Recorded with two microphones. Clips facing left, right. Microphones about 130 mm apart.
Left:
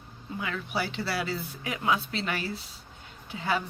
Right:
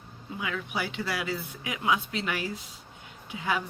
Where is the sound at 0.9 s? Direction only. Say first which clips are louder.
Left 1 dB; 35° left (ahead or behind).